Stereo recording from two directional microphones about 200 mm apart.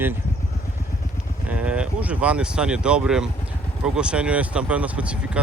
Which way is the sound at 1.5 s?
5° right (ahead or behind).